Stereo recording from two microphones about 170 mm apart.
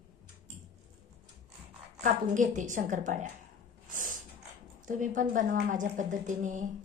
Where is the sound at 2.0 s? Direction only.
50° right (ahead or behind).